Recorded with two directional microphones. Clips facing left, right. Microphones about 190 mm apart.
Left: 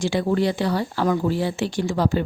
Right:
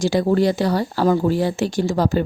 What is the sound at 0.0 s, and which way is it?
Speech, 40° right (ahead or behind).